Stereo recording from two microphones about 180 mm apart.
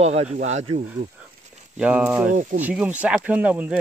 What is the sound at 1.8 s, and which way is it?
Speech, 5° right (ahead or behind).